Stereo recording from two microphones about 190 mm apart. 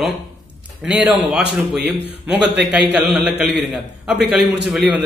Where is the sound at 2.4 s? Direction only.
65° right (ahead or behind).